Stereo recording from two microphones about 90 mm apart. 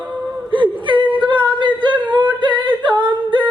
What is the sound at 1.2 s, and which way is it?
Singing, 60° right (ahead or behind).